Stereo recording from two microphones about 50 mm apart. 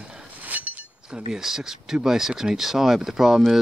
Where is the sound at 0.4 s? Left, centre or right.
Right.